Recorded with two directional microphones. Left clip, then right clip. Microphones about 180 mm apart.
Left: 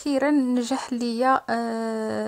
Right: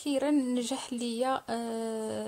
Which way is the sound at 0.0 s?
30° left (ahead or behind).